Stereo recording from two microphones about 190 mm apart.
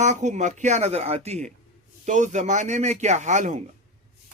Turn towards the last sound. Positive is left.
turn(degrees=-40)  # may be behind; listen again after turning